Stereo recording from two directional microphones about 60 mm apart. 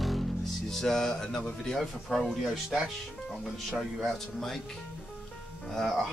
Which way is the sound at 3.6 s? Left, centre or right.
Centre.